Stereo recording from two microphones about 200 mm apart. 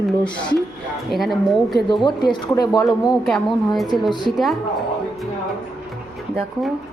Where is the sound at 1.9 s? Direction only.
25° left (ahead or behind).